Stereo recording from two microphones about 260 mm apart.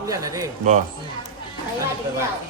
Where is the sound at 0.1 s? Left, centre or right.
Centre.